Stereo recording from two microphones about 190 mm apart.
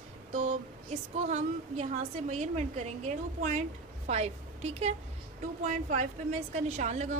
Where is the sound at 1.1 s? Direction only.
35° right (ahead or behind).